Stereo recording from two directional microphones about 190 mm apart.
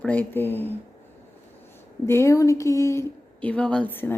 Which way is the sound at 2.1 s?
15° left (ahead or behind).